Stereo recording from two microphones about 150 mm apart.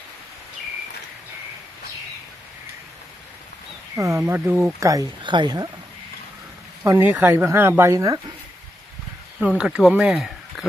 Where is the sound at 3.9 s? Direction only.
20° right (ahead or behind).